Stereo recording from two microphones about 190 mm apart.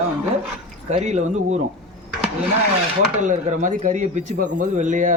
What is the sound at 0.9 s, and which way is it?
Speech, 35° right (ahead or behind).